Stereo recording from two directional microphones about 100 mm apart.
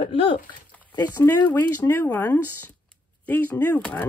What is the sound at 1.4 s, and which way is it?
Speech, 20° left (ahead or behind).